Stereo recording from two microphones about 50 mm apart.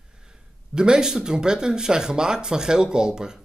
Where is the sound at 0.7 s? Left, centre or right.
Centre.